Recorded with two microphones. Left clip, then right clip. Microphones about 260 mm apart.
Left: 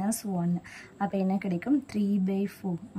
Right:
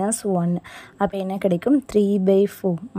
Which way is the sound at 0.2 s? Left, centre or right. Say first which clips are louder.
Right 11 dB; right.